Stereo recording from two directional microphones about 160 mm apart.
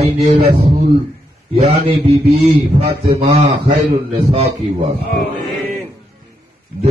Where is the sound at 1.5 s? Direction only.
40° right (ahead or behind).